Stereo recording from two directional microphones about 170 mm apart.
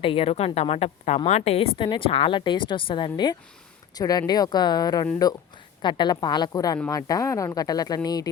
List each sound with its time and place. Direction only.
0.0 s a woman's voice: 35° left (ahead or behind)